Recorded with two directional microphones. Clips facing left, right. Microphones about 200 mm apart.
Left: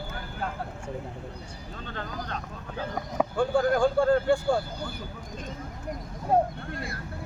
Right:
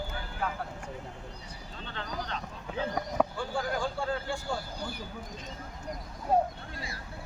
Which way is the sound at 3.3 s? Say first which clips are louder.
Left 9 dB; 55° left (ahead or behind).